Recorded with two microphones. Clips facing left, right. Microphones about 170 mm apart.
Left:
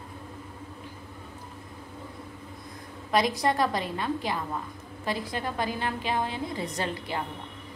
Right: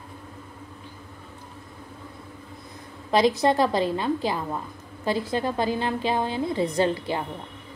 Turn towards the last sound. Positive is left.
turn(degrees=-25)  # may be behind; listen again after turning